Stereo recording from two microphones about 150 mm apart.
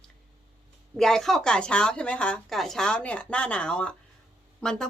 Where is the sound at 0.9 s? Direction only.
5° left (ahead or behind).